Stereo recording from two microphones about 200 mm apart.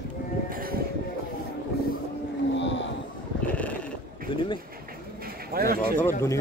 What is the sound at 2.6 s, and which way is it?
Boat, 65° left (ahead or behind).